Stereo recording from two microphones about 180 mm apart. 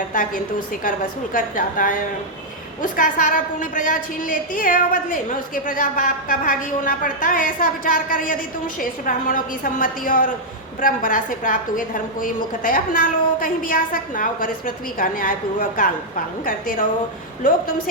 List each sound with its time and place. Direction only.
0.9 s a woman's voice: 50° left (ahead or behind)